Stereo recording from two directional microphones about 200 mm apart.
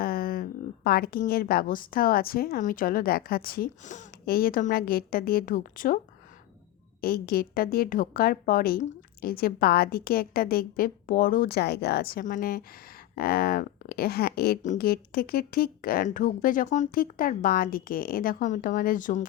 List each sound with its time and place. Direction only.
0.0 s speech: 50° left (ahead or behind)
7.0 s speech: 50° left (ahead or behind)